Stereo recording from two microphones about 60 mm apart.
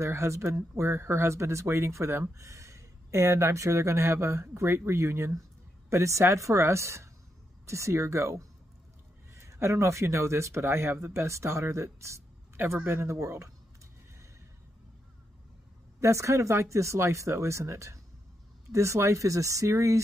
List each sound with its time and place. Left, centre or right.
0.0 s speech: right
16.0 s speech: right